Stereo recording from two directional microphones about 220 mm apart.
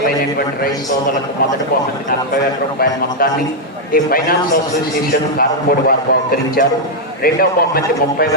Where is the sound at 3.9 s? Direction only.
40° left (ahead or behind).